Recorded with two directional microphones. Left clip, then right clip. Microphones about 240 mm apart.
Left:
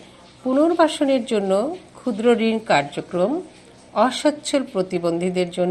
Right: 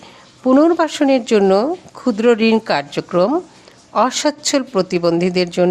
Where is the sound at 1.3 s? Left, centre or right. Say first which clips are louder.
Right 7 dB; right.